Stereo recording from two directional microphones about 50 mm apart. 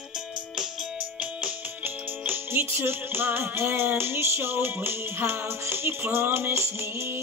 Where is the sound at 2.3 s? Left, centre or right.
Right.